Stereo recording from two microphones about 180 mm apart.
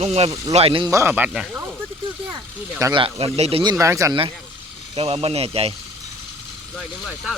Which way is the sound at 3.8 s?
15° right (ahead or behind).